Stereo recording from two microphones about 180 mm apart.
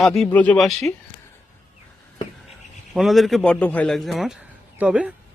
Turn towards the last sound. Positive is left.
turn(degrees=-5)  # may be behind; listen again after turning